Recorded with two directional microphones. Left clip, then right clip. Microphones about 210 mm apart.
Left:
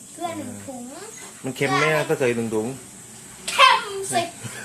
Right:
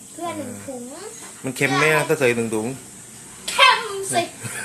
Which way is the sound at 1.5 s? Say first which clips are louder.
Right 2 dB; centre (ahead or behind).